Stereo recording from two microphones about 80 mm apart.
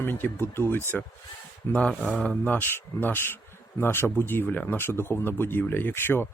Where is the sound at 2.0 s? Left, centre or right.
Centre.